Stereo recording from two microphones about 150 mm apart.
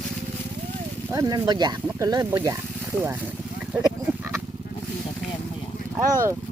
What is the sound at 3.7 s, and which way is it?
Speech, 10° right (ahead or behind).